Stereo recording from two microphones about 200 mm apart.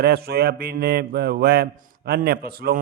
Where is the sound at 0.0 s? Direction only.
50° right (ahead or behind).